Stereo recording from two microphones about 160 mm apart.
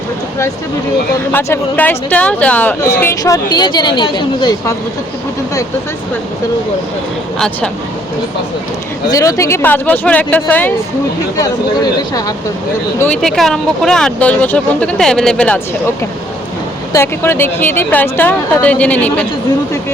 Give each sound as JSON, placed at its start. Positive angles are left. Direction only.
{"t": 1.3, "sound": "speech", "side_deg": 15}
{"t": 7.3, "sound": "speech", "side_deg": 5}
{"t": 9.0, "sound": "speech", "side_deg": 20}
{"t": 11.3, "sound": "speech", "side_deg": 20}
{"t": 13.0, "sound": "speech", "side_deg": 5}
{"t": 16.9, "sound": "speech", "side_deg": 15}